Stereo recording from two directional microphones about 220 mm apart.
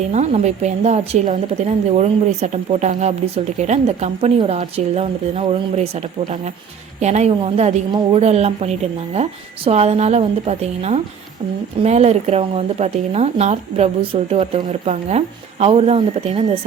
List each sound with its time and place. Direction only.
0.1 s a woman's voice: 30° right (ahead or behind)